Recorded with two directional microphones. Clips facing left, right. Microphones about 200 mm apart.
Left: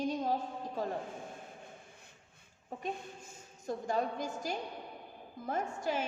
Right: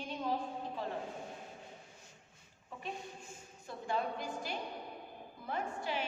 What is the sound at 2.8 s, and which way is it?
A woman's voice, 40° left (ahead or behind).